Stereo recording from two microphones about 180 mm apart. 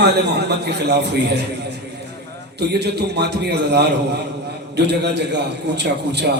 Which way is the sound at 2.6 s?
65° right (ahead or behind).